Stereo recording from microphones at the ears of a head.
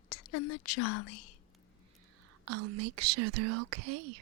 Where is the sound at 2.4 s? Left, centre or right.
Right.